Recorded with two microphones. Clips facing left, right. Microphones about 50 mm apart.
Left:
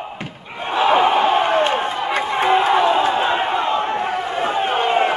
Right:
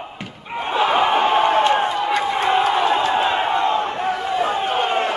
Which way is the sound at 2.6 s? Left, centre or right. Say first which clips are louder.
Left 2 dB; left.